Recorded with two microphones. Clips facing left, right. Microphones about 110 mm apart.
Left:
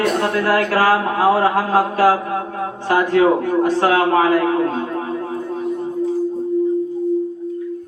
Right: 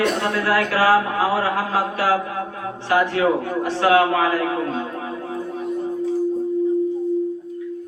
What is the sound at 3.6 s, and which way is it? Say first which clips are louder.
Speech: right 1 dB; 40° left (ahead or behind).